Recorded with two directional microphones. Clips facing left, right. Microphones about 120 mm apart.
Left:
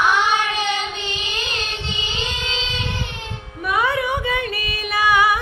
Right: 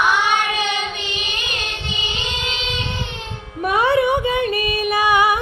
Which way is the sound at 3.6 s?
30° right (ahead or behind).